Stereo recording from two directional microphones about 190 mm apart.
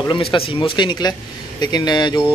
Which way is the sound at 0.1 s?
30° left (ahead or behind).